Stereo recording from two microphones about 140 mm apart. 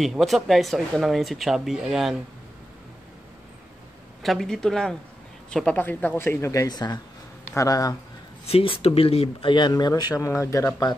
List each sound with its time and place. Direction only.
0.0 s speech: centre (ahead or behind)
4.2 s speech: centre (ahead or behind); by 7.9 s 25° left (ahead or behind)
8.5 s speech: 40° left (ahead or behind); by 10.7 s 20° left (ahead or behind)